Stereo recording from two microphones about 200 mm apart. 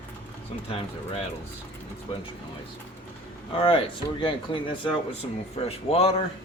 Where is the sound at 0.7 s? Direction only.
30° left (ahead or behind).